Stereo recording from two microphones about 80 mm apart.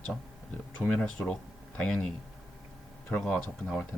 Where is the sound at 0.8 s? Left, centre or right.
Centre.